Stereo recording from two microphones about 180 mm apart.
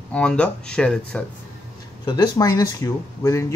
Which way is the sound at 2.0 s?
25° left (ahead or behind).